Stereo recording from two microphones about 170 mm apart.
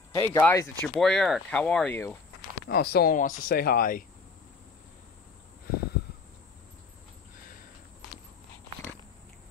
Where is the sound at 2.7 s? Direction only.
65° left (ahead or behind).